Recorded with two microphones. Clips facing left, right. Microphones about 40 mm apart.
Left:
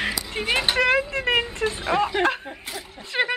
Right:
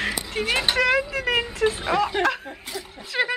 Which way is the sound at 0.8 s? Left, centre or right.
Left.